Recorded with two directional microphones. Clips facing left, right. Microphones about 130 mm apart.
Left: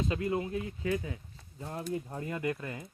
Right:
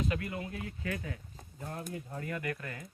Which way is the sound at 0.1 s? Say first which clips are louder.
Left 5 dB; 25° left (ahead or behind).